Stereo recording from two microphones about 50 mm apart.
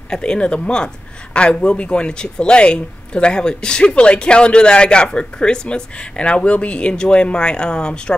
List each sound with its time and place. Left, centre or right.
0.1 s speech: centre